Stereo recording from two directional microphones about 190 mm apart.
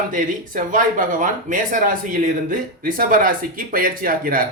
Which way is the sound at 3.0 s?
45° right (ahead or behind).